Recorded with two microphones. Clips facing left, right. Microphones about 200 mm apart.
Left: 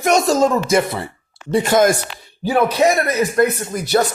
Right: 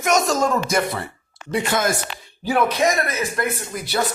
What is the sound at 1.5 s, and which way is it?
Speech, 45° left (ahead or behind).